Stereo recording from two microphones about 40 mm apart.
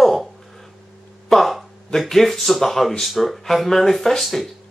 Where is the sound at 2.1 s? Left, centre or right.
Centre.